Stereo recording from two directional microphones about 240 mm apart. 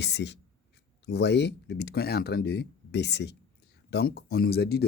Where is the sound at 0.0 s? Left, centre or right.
Left.